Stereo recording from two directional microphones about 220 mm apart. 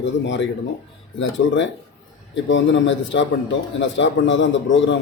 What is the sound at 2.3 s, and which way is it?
Speech, 55° left (ahead or behind).